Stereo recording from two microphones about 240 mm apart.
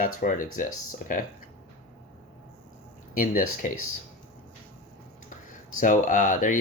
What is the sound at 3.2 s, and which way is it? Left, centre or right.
Speech, left.